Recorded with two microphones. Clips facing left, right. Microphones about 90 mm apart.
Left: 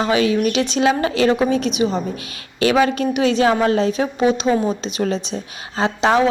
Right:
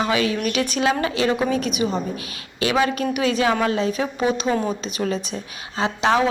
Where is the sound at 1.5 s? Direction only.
45° right (ahead or behind).